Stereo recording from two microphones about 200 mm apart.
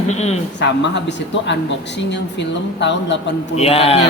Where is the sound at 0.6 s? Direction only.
60° left (ahead or behind).